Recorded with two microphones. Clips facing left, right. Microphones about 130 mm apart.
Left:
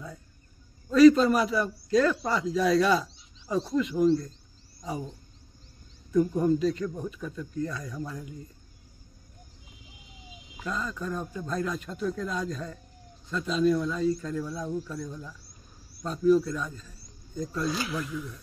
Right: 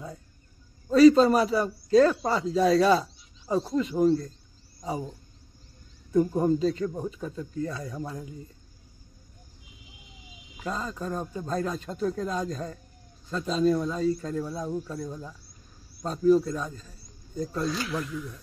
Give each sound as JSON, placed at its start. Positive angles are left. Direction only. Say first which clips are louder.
{"t": 0.8, "sound": "a man's voice", "louder": "right 1 dB", "side_deg": -35}
{"t": 6.1, "sound": "speech", "louder": "right 1 dB", "side_deg": -30}
{"t": 10.6, "sound": "a man's voice", "louder": "right 1 dB", "side_deg": -35}
{"t": 16.0, "sound": "a man's voice", "louder": "right 1 dB", "side_deg": -35}
{"t": 17.6, "sound": "speech", "louder": "even", "side_deg": 10}